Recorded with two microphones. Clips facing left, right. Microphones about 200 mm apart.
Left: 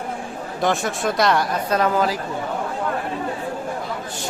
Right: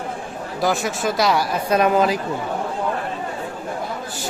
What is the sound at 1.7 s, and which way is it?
Speech, 15° right (ahead or behind).